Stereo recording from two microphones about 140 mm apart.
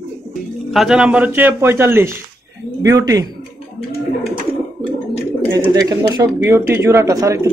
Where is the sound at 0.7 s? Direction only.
5° right (ahead or behind); by 3.3 s 25° right (ahead or behind).